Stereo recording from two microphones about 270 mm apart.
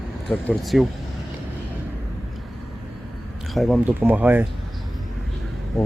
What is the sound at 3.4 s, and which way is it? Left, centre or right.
Speech, centre.